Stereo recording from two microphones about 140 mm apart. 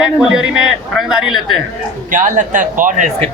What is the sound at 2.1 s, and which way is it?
Speech, 65° right (ahead or behind).